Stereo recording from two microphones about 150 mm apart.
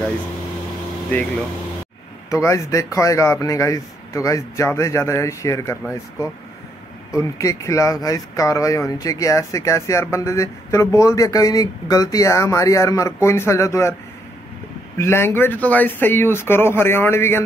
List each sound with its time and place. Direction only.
2.2 s speech: 20° left (ahead or behind)
7.1 s speech: 20° left (ahead or behind)
15.0 s speech: 15° left (ahead or behind)